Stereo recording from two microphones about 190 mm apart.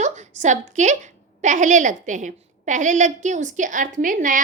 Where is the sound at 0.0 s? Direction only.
40° right (ahead or behind).